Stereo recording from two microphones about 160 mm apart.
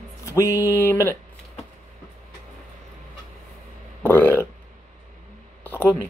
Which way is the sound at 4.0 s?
15° left (ahead or behind).